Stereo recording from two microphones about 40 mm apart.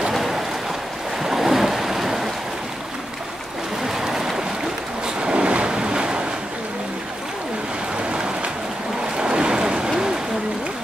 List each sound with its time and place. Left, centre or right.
0.1 s a sound: centre
1.2 s waves: centre
3.8 s waves: centre
5.0 s ocean: right
8.0 s rain: right
9.0 s boat: centre